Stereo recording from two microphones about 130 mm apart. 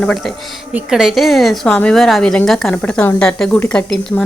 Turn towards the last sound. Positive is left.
turn(degrees=5)  # may be behind; listen again after turning